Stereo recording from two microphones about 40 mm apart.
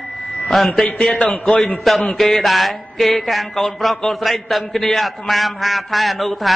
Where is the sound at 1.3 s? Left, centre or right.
Left.